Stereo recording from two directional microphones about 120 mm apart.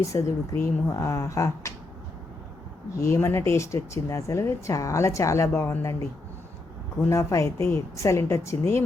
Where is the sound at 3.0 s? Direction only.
25° left (ahead or behind).